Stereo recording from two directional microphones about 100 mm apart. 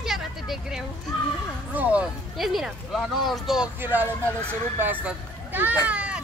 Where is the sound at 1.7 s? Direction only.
15° right (ahead or behind).